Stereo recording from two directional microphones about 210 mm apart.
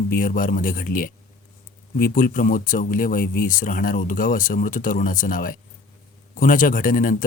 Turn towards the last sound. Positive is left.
turn(degrees=40)  # may be behind; listen again after turning